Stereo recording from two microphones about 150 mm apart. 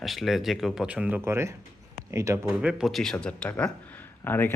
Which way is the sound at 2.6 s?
5° right (ahead or behind).